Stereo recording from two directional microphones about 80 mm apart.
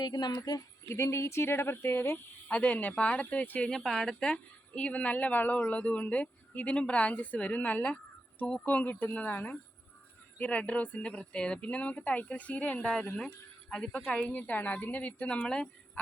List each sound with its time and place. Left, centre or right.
0.0 s a woman's voice: left
0.9 s speech: left
2.5 s speech: centre
3.7 s speech: centre